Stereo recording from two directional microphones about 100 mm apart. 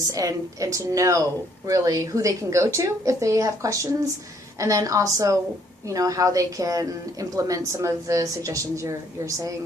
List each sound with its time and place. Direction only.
0.1 s speech: 35° right (ahead or behind)